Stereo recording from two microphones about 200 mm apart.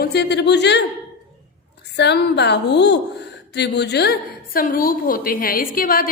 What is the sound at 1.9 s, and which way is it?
A woman's voice, 60° left (ahead or behind).